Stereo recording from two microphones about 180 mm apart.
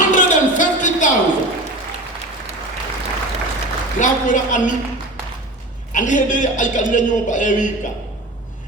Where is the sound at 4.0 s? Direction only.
45° left (ahead or behind).